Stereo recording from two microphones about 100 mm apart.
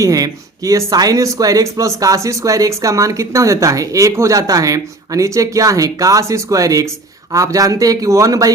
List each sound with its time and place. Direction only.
0.0 s speech: 35° right (ahead or behind)